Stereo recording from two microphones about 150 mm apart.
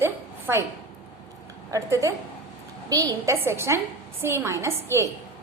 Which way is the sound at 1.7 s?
20° right (ahead or behind).